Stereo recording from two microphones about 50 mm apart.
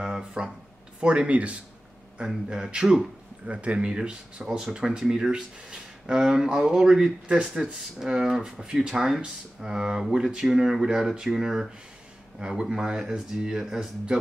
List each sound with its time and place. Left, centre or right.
0.0 s a sound: centre
1.0 s speech: right
2.1 s speech: centre